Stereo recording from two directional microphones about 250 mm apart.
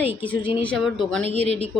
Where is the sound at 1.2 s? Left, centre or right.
Right.